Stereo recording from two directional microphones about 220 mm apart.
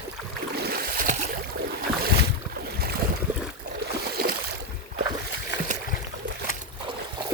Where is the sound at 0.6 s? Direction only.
45° right (ahead or behind).